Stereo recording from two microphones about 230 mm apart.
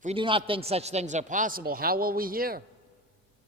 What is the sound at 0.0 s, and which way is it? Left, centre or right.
A man's voice, right.